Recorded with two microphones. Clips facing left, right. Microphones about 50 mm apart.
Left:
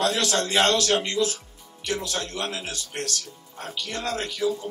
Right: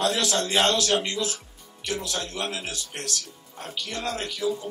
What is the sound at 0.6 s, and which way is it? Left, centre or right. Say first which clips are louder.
Speech: left 2 dB; left.